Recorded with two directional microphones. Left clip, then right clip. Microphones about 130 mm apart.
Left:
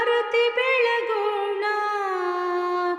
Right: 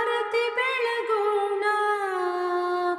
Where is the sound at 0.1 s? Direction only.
10° left (ahead or behind).